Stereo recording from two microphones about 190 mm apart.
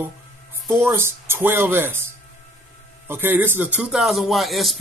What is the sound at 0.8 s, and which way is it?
Speech, 15° right (ahead or behind).